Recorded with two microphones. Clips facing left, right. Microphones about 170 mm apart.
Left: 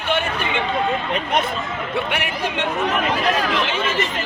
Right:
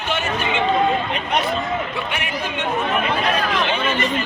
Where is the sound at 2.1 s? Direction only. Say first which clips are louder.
Left 2 dB; 65° left (ahead or behind).